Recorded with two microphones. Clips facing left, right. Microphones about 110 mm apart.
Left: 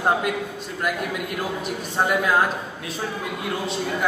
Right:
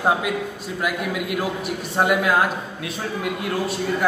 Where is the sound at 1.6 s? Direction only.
5° right (ahead or behind).